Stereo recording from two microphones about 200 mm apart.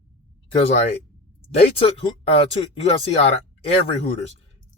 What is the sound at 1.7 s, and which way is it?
Speech, 30° left (ahead or behind).